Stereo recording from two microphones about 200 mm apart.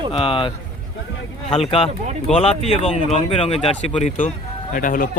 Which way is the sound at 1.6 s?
30° left (ahead or behind).